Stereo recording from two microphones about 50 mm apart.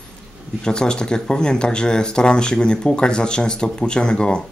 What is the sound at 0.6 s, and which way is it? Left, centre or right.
Speech, centre.